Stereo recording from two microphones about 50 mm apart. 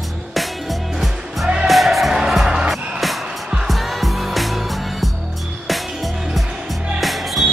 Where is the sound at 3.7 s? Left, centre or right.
Centre.